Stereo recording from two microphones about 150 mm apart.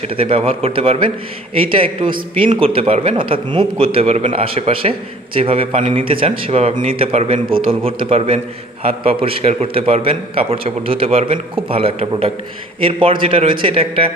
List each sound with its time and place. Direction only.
0.1 s a man's voice: 40° right (ahead or behind)